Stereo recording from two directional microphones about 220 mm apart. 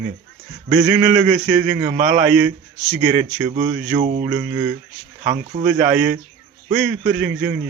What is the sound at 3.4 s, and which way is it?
Speech, 30° right (ahead or behind).